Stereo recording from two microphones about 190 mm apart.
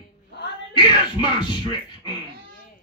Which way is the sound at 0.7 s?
25° left (ahead or behind).